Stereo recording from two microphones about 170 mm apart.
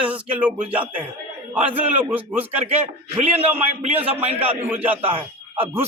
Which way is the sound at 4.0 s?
10° right (ahead or behind).